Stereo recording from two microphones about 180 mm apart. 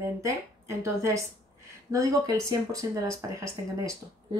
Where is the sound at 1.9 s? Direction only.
20° right (ahead or behind).